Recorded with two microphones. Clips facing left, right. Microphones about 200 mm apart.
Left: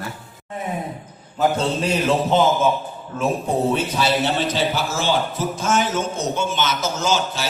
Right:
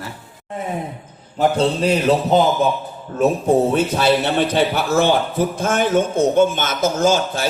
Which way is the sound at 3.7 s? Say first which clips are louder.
Right 4 dB; 55° right (ahead or behind).